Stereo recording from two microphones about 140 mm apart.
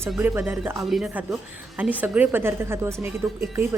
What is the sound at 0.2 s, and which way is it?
Speech, 15° right (ahead or behind).